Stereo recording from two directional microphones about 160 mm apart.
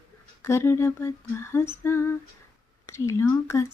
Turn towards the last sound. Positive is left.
turn(degrees=15)  # may be behind; listen again after turning